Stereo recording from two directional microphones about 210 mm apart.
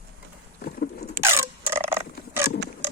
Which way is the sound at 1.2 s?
10° right (ahead or behind).